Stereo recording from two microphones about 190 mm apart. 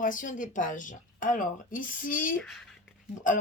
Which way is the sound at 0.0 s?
45° left (ahead or behind).